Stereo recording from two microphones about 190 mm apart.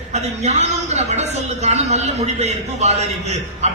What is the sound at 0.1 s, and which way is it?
A woman's voice, 35° right (ahead or behind).